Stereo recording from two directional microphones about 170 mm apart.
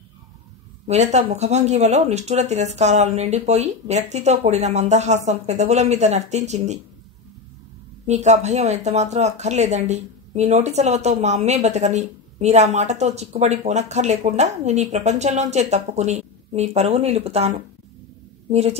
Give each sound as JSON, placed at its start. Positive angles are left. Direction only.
{"t": 0.8, "sound": "speech", "side_deg": -40}
{"t": 8.1, "sound": "speech", "side_deg": -40}